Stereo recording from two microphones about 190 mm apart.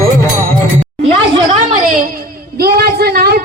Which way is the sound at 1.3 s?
35° right (ahead or behind).